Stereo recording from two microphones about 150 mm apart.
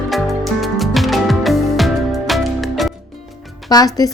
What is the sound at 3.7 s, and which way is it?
Speech, 25° left (ahead or behind).